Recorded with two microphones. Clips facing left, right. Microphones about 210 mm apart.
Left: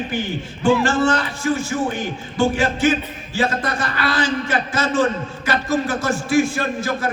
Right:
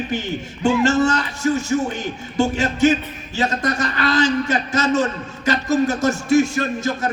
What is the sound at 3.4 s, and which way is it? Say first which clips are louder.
A man's voice: even; 40° right (ahead or behind).